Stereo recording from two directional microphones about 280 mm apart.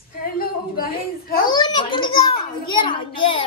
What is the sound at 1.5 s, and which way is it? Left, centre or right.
A child's voice, centre.